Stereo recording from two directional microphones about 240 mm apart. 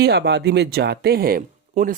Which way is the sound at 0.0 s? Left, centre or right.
Right.